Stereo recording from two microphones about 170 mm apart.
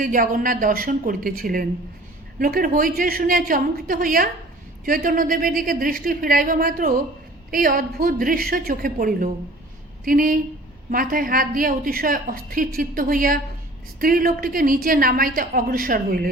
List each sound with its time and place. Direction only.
0.0 s a woman's voice: 55° right (ahead or behind)